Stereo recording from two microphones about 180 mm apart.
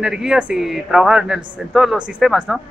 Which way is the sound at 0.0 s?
5° right (ahead or behind).